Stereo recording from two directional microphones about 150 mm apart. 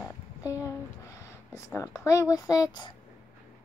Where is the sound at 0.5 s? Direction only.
20° left (ahead or behind).